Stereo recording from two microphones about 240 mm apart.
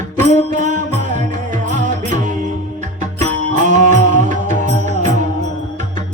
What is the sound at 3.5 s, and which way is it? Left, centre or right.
Music, right.